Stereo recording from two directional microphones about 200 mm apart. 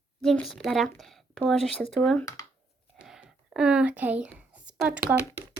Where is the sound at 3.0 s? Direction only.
5° right (ahead or behind).